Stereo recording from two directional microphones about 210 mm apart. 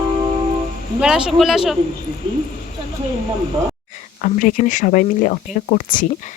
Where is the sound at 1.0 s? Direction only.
5° right (ahead or behind).